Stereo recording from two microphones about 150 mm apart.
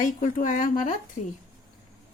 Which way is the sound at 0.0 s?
60° left (ahead or behind).